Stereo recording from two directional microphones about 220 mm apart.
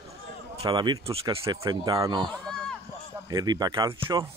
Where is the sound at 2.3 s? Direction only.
Centre (ahead or behind).